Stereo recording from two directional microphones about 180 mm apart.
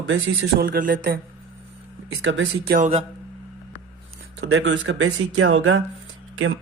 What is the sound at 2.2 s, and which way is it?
Speech, 80° right.